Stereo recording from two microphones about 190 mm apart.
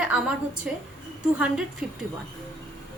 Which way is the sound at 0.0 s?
5° right (ahead or behind).